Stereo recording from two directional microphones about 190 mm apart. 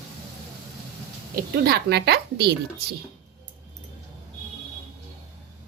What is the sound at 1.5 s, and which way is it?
Speech, 55° right (ahead or behind).